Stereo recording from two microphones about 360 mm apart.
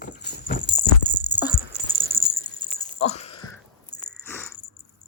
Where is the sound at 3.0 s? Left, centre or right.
Centre.